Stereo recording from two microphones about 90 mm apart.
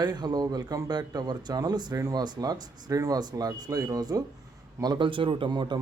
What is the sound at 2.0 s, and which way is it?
Speech, 35° right (ahead or behind).